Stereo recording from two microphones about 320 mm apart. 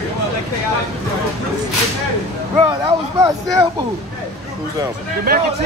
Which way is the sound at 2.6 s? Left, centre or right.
Centre.